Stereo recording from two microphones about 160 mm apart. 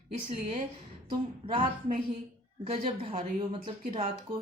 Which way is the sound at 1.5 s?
35° right (ahead or behind).